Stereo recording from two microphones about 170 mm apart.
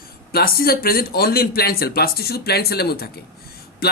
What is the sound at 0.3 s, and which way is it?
Speech, 65° left (ahead or behind).